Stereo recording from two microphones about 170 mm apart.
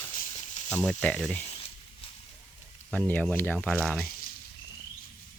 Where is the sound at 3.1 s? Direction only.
10° left (ahead or behind).